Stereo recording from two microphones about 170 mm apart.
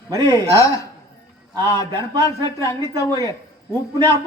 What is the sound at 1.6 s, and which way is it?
Speech, 20° left (ahead or behind).